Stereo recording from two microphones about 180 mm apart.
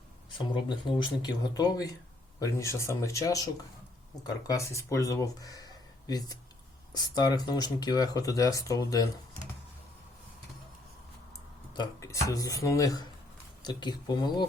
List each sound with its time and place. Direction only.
0.3 s speech: 25° left (ahead or behind)
11.8 s speech: 15° left (ahead or behind)